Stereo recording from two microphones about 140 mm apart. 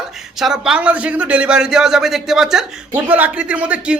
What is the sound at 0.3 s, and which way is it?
A man's voice, 5° right (ahead or behind).